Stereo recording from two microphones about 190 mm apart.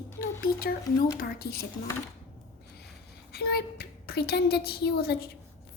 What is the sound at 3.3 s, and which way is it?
A woman's voice, 55° left (ahead or behind).